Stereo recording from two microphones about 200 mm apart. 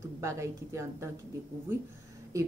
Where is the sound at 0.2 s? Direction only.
15° right (ahead or behind).